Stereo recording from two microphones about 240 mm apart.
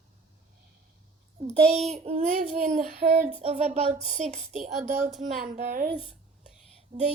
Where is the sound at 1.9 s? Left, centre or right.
Right.